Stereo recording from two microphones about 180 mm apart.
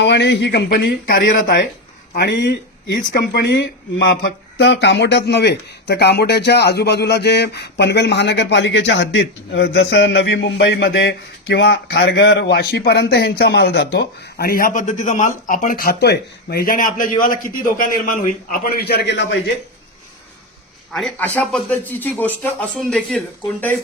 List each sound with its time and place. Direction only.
0.0 s speech: 75° left (ahead or behind); by 1.2 s 55° left (ahead or behind)
2.1 s a man's voice: 70° left (ahead or behind)
20.9 s speech: 5° left (ahead or behind)